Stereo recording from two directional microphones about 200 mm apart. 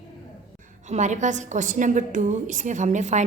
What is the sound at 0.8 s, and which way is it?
A woman's voice, 35° right (ahead or behind).